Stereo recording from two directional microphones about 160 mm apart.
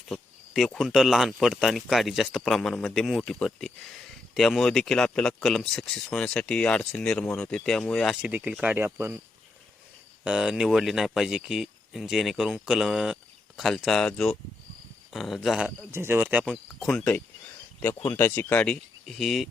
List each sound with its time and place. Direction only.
0.1 s a man's voice: centre (ahead or behind)
10.2 s a man's voice: 5° right (ahead or behind)
15.9 s speech: 15° right (ahead or behind)
16.8 s speech: 5° left (ahead or behind)